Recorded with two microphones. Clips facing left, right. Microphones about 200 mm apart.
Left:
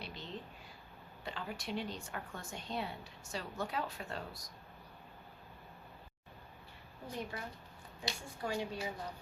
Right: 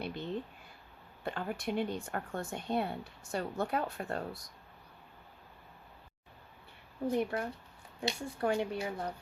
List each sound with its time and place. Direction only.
0.0 s a sound: 55° right (ahead or behind)
1.2 s speech: 50° right (ahead or behind)
7.1 s speech: 60° right (ahead or behind)